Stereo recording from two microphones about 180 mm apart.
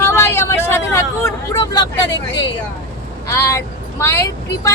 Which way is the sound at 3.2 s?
15° left (ahead or behind).